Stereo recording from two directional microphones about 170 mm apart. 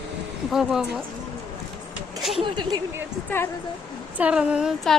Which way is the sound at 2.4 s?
25° right (ahead or behind).